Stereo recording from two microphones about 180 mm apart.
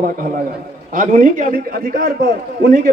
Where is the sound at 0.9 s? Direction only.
45° right (ahead or behind).